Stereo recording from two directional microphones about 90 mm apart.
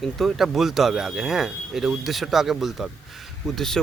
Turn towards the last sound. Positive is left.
turn(degrees=5)  # may be behind; listen again after turning